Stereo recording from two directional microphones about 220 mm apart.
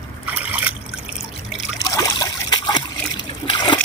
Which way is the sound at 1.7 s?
15° left (ahead or behind).